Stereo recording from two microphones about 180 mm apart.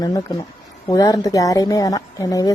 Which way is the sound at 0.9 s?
20° left (ahead or behind).